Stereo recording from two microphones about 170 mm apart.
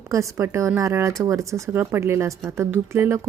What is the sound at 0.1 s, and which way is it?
A woman's voice, 15° right (ahead or behind).